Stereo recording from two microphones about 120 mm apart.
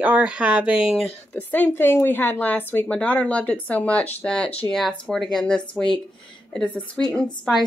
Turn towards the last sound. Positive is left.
turn(degrees=5)  # may be behind; listen again after turning